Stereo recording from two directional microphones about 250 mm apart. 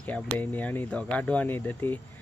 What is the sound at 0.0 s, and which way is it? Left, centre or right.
Speech, centre.